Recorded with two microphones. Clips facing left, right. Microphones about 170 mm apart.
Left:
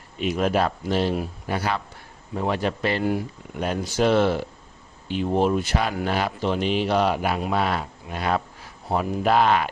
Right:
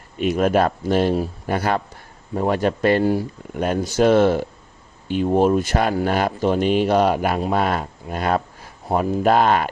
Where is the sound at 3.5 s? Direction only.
45° right (ahead or behind).